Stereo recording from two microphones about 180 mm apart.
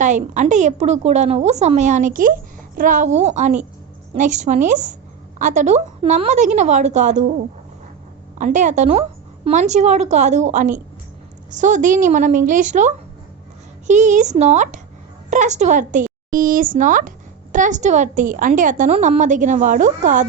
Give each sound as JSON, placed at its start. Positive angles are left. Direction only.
{"t": 0.0, "sound": "a woman's voice", "side_deg": -45}
{"t": 8.4, "sound": "a woman's voice", "side_deg": -40}